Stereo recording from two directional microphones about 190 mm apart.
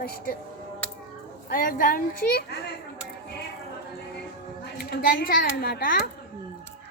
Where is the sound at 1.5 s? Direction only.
50° left (ahead or behind).